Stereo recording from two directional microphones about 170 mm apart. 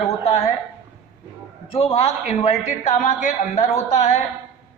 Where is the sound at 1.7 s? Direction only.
35° left (ahead or behind).